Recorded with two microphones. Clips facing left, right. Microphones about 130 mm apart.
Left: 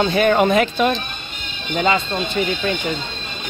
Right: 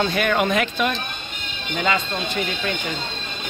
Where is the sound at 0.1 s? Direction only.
35° left (ahead or behind).